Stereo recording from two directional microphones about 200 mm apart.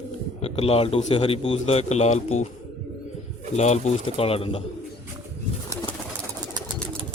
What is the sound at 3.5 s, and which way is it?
A man's voice, 35° left (ahead or behind).